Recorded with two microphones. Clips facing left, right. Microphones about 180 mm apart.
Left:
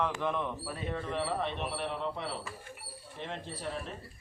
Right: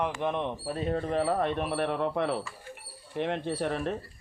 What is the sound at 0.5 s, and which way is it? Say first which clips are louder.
A man's voice: right 7 dB; 35° right (ahead or behind).